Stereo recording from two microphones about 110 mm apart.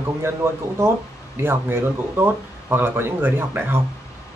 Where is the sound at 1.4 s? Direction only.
20° right (ahead or behind).